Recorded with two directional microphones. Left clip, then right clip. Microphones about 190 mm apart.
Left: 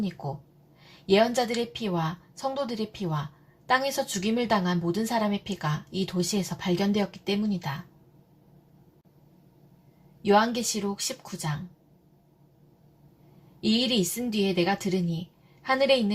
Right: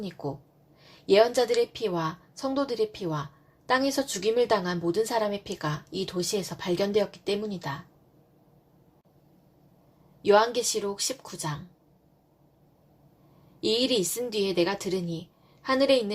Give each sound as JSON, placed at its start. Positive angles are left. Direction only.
{"t": 1.0, "sound": "a woman's voice", "side_deg": -40}
{"t": 10.2, "sound": "a woman's voice", "side_deg": -40}
{"t": 13.6, "sound": "a woman's voice", "side_deg": -40}